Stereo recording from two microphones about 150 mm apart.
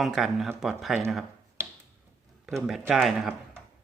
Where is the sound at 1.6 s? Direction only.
15° right (ahead or behind).